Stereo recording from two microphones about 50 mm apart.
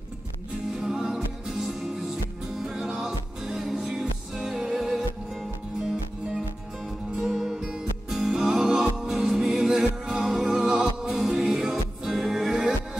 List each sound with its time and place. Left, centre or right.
0.7 s music: centre
7.2 s music: centre
7.6 s music: centre